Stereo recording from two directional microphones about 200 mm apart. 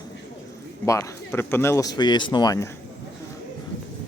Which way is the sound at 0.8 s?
15° left (ahead or behind).